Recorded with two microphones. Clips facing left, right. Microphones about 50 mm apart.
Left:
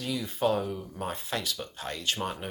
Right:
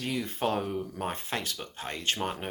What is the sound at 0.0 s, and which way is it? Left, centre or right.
Speech, right.